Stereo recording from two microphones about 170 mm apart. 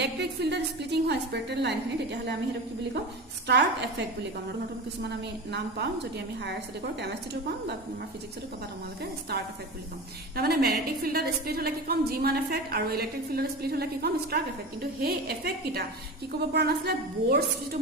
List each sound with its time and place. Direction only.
0.0 s a woman's voice: 80° right
3.4 s a woman's voice: 80° right
5.0 s a woman's voice: 80° right
10.3 s a woman's voice: 65° right (ahead or behind)